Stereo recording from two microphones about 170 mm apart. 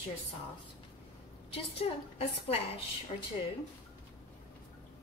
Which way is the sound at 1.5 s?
35° left (ahead or behind).